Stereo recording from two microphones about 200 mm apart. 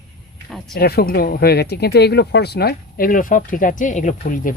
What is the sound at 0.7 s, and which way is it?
Speech, 50° left (ahead or behind).